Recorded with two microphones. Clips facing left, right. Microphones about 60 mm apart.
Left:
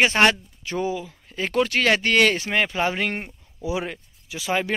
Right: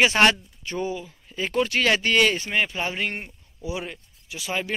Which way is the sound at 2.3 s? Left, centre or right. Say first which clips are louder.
Left 2 dB; left.